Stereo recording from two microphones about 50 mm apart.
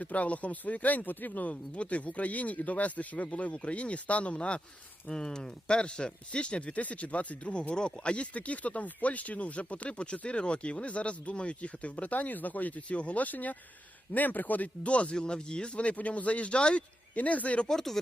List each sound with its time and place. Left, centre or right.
0.0 s speech: left
5.0 s speech: centre
17.7 s speech: centre